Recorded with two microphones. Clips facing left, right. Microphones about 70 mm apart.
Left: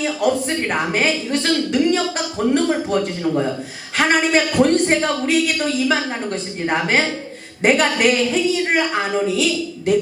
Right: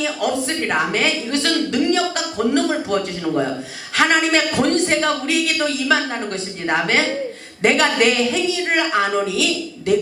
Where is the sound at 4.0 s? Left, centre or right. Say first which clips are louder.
Even; right.